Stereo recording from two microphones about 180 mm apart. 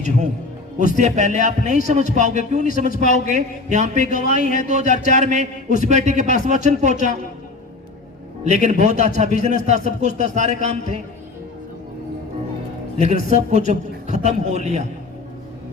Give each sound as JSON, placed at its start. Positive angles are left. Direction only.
{"t": 0.9, "sound": "a man's voice", "side_deg": -40}
{"t": 8.4, "sound": "speech", "side_deg": -40}
{"t": 13.0, "sound": "speech", "side_deg": -40}